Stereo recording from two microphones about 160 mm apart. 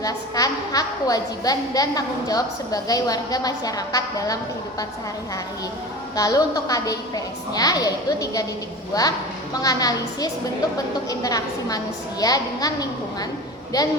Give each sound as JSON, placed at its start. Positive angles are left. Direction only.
{"t": 0.0, "sound": "a woman's voice", "side_deg": 20}
{"t": 6.1, "sound": "a woman's voice", "side_deg": 20}